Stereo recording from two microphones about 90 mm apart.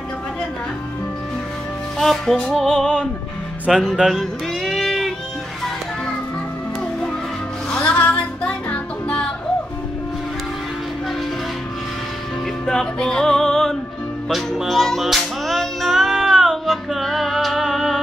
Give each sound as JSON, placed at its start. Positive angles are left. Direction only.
{"t": 2.0, "sound": "music", "side_deg": 5}
{"t": 7.7, "sound": "music", "side_deg": 15}
{"t": 12.6, "sound": "music", "side_deg": 5}